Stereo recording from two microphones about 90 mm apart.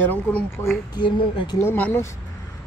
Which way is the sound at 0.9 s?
60° left (ahead or behind).